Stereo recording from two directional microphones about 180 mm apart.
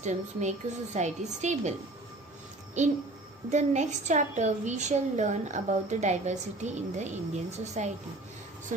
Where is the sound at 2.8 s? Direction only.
40° right (ahead or behind).